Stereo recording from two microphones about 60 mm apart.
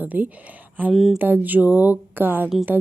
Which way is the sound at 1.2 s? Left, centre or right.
Right.